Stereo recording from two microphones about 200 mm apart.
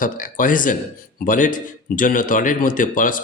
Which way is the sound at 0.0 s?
40° left (ahead or behind).